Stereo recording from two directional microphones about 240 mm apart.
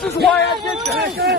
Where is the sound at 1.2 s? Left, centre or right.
Right.